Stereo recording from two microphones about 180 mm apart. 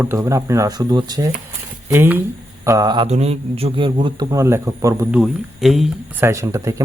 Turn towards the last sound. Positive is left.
turn(degrees=-15)  # may be behind; listen again after turning